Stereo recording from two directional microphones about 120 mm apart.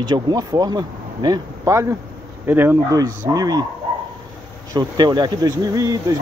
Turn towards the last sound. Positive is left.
turn(degrees=-30)  # may be behind; listen again after turning